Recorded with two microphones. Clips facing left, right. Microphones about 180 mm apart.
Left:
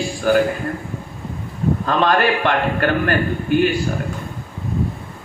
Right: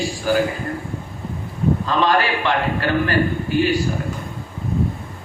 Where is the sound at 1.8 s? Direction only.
55° left (ahead or behind).